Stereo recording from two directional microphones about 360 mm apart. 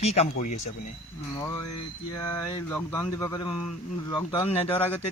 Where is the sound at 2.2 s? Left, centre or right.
Centre.